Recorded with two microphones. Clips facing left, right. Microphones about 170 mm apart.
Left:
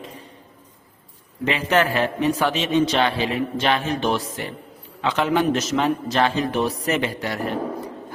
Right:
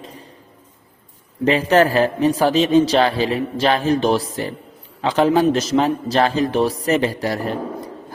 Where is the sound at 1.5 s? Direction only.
40° right (ahead or behind).